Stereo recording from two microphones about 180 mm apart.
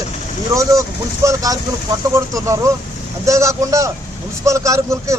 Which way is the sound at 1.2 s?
20° right (ahead or behind).